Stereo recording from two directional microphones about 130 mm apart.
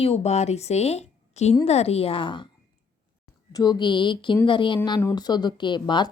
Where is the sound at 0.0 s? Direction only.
55° left (ahead or behind).